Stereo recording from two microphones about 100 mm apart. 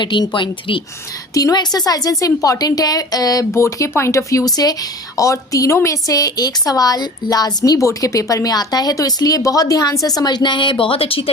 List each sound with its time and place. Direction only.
0.0 s speech: 50° left (ahead or behind)
1.3 s speech: 35° left (ahead or behind)
3.5 s speech: 30° left (ahead or behind); by 11.3 s 70° left (ahead or behind)